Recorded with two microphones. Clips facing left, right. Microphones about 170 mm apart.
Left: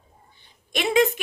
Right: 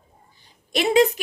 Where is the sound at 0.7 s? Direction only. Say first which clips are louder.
Right 3 dB; 40° right (ahead or behind).